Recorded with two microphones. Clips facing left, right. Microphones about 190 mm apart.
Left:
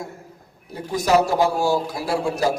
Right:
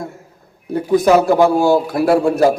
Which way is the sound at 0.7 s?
55° right (ahead or behind).